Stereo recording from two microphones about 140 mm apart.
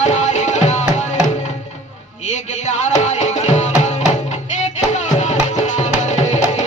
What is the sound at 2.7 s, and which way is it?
Music, 55° left (ahead or behind).